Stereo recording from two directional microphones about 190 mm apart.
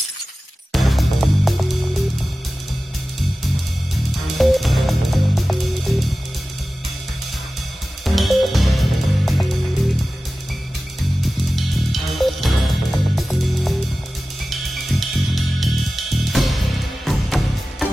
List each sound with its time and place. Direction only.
0.7 s music: centre (ahead or behind)
4.4 s music: centre (ahead or behind)
8.0 s music: centre (ahead or behind)
11.1 s music: centre (ahead or behind)